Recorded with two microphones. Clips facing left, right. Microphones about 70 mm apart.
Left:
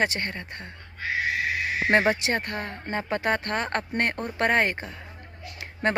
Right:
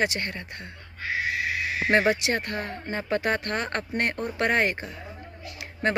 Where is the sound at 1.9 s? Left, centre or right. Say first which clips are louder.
Even; left.